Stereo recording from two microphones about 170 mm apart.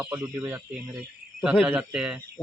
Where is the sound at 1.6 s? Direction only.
10° right (ahead or behind).